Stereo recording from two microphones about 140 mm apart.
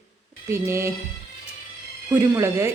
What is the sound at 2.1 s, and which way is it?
Speech, 15° right (ahead or behind).